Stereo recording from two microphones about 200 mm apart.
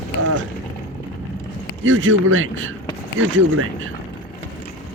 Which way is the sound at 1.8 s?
70° right (ahead or behind).